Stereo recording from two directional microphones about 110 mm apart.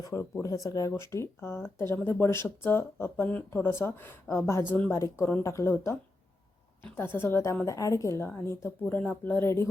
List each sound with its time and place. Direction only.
0.0 s speech: 25° left (ahead or behind)
8.8 s speech: 15° left (ahead or behind)